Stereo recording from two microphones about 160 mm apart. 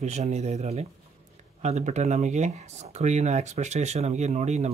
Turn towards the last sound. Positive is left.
turn(degrees=-45)  # may be behind; listen again after turning